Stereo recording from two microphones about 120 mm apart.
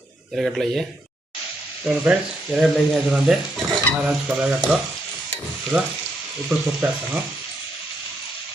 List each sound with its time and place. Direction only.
0.3 s speech: 5° right (ahead or behind)
1.9 s speech: 5° right (ahead or behind)
3.2 s frying: 5° right (ahead or behind)